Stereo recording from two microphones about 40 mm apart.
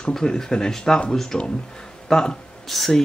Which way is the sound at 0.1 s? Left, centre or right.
Centre.